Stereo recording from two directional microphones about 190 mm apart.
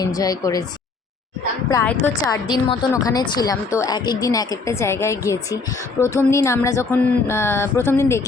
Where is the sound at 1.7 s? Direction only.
15° left (ahead or behind).